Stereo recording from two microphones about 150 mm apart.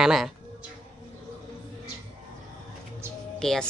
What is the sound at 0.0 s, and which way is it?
Speech, centre (ahead or behind).